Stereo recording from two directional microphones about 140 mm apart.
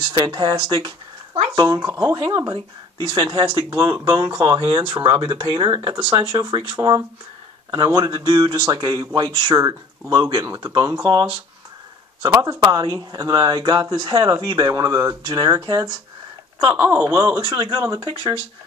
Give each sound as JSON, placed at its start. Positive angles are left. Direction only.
{"t": 0.0, "sound": "speech", "side_deg": -35}
{"t": 1.7, "sound": "speech", "side_deg": -20}
{"t": 4.6, "sound": "speech", "side_deg": -40}
{"t": 11.1, "sound": "speech", "side_deg": -30}
{"t": 17.4, "sound": "speech", "side_deg": -30}